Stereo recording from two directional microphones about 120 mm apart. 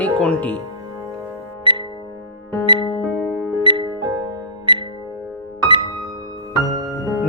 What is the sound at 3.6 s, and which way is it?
Music, 45° right (ahead or behind).